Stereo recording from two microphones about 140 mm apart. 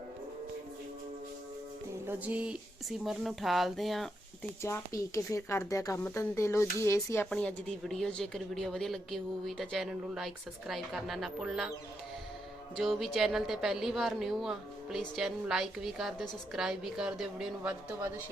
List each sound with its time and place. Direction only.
2.0 s a sound: 10° right (ahead or behind)
3.0 s a woman's voice: centre (ahead or behind)
4.6 s speech: 20° left (ahead or behind)
7.3 s a woman's voice: 5° left (ahead or behind)
12.7 s a woman's voice: centre (ahead or behind)